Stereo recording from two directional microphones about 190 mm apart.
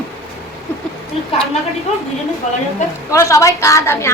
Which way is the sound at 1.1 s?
30° left (ahead or behind).